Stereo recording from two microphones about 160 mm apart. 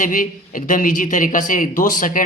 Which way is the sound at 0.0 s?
55° left (ahead or behind).